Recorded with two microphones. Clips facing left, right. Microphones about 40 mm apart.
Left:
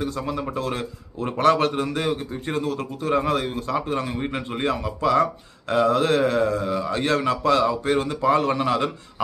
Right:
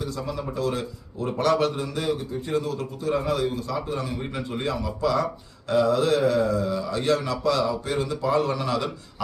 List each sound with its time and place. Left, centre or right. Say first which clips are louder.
0.0 s a man's voice: left 3 dB; left